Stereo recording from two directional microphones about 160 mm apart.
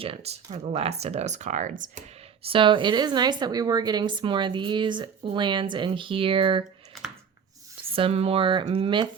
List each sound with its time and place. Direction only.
0.0 s speech: 40° right (ahead or behind)
2.5 s a woman's voice: 30° right (ahead or behind)
7.9 s speech: 35° right (ahead or behind)